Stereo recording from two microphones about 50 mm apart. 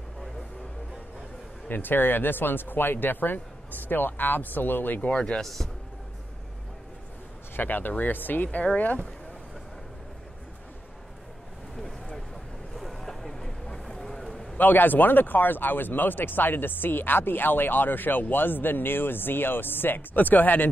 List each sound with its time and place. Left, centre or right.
1.7 s speech: left
5.1 s speech: left
5.4 s speech: centre
7.5 s speech: left
12.7 s boat: centre
13.8 s vehicle: centre
14.6 s speech: left